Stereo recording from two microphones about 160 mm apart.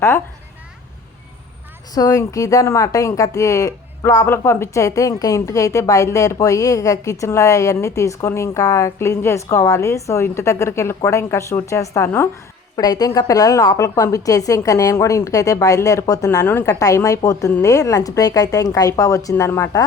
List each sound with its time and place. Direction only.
2.0 s speech: 20° left (ahead or behind)